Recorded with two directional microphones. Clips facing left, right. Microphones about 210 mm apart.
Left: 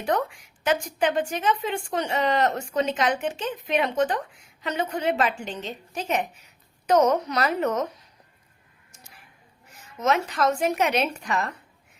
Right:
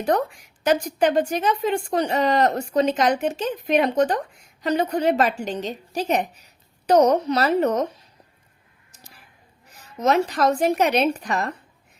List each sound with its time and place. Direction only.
0.0 s a woman's voice: 40° right (ahead or behind)
10.0 s a woman's voice: 35° right (ahead or behind)